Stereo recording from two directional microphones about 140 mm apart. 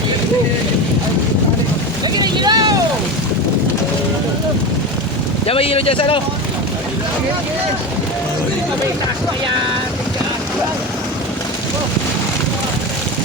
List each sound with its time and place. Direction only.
2.2 s vehicle: 30° right (ahead or behind)
5.5 s speech: 45° left (ahead or behind)